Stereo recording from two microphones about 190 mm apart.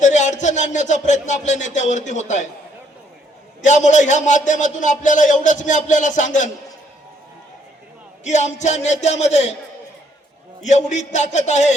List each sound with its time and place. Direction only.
0.0 s a man's voice: 40° left (ahead or behind)
3.6 s a man's voice: 40° left (ahead or behind)
8.2 s a man's voice: 40° left (ahead or behind)
10.6 s a man's voice: 40° left (ahead or behind)